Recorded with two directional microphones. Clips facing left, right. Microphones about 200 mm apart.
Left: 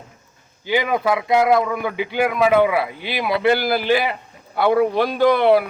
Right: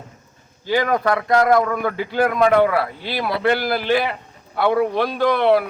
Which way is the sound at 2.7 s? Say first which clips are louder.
Even; 15° left (ahead or behind).